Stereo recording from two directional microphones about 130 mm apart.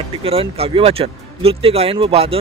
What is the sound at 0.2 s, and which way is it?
Speech, 45° right (ahead or behind).